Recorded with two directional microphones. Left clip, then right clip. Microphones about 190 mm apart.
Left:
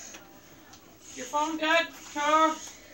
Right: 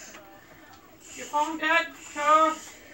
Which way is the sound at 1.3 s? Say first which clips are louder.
Right 1 dB; 55° left (ahead or behind).